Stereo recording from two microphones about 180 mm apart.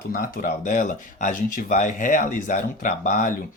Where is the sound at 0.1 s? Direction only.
50° left (ahead or behind).